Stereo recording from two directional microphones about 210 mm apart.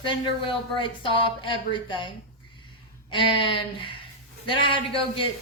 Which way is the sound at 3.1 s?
25° left (ahead or behind).